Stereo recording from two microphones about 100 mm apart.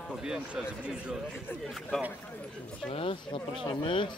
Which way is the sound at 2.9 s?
60° left (ahead or behind).